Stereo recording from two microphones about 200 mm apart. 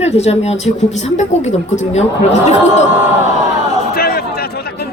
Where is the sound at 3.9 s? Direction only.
50° left (ahead or behind).